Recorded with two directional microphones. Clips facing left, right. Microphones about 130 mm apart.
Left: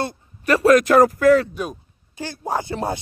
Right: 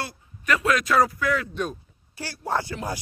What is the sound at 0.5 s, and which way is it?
A man's voice, 40° left (ahead or behind).